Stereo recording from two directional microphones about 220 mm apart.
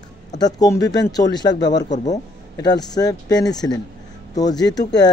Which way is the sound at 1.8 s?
35° left (ahead or behind).